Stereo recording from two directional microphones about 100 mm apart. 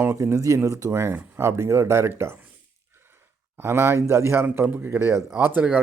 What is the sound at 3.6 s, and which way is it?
A man's voice, 25° right (ahead or behind).